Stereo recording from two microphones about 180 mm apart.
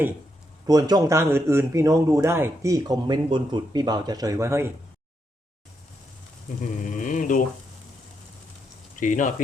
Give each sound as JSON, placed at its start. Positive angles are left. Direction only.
{"t": 0.7, "sound": "speech", "side_deg": -20}
{"t": 6.6, "sound": "a sound", "side_deg": 45}
{"t": 9.0, "sound": "speech", "side_deg": 45}